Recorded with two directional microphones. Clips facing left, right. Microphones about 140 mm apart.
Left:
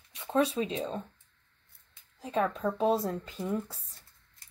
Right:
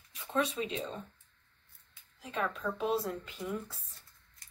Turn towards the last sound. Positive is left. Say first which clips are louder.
# left 5 dB
turn(degrees=35)  # may be behind; listen again after turning